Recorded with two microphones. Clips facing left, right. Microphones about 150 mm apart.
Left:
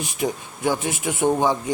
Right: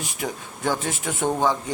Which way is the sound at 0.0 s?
15° left (ahead or behind).